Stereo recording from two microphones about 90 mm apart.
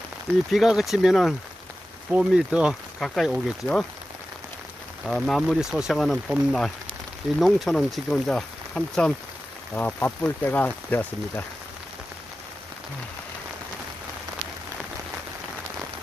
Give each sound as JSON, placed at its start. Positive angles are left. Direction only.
{"t": 0.5, "sound": "speech", "side_deg": 0}
{"t": 5.0, "sound": "speech", "side_deg": 0}